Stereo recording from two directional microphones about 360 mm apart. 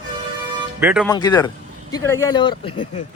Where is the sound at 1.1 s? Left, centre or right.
Centre.